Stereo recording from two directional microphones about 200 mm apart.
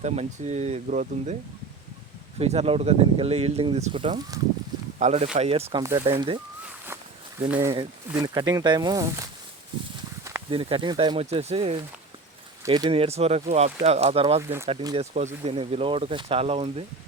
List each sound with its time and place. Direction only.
0.0 s speech: 35° right (ahead or behind)
2.4 s speech: 30° right (ahead or behind)
7.4 s speech: 10° right (ahead or behind)
10.5 s speech: 25° right (ahead or behind)